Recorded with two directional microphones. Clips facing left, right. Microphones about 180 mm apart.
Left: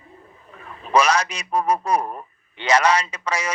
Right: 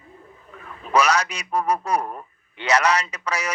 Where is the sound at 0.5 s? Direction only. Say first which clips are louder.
Left 2 dB; 25° left (ahead or behind).